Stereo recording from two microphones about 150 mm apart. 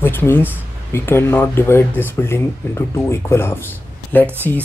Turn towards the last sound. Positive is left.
turn(degrees=10)  # may be behind; listen again after turning